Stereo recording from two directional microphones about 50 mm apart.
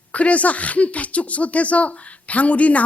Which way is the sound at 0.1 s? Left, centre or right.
Left.